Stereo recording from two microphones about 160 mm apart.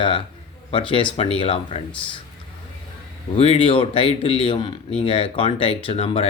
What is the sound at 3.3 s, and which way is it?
Speech, 35° left (ahead or behind).